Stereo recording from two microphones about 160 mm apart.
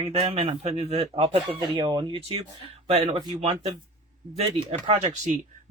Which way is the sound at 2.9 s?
40° right (ahead or behind).